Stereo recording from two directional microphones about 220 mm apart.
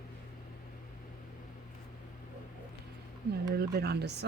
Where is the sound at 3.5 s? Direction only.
45° right (ahead or behind).